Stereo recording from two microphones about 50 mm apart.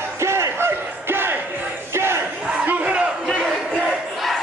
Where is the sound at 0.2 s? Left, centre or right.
Right.